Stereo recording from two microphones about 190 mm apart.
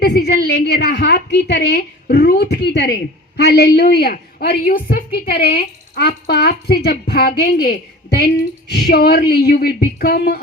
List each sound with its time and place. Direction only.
0.0 s a woman's voice: 60° left (ahead or behind)
8.7 s a woman's voice: 55° left (ahead or behind)